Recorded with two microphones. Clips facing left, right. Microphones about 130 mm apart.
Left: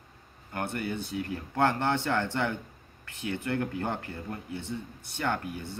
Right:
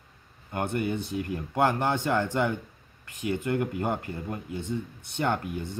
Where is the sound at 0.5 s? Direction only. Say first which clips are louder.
Right 4 dB; 20° right (ahead or behind).